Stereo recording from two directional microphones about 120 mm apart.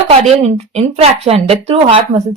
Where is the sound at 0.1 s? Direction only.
60° right (ahead or behind).